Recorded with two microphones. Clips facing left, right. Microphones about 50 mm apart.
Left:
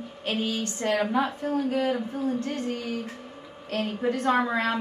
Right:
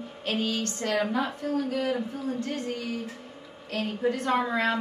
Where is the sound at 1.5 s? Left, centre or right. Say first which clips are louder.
Left 2 dB; left.